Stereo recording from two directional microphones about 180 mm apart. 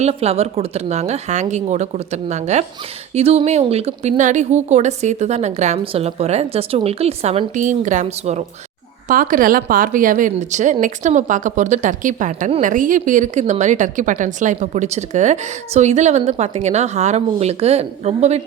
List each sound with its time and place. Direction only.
0.0 s a woman's voice: 35° right (ahead or behind)